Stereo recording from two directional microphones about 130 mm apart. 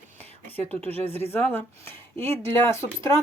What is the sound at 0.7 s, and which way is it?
Speech, 15° left (ahead or behind).